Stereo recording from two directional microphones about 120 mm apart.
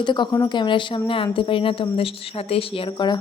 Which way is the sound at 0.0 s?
40° left (ahead or behind).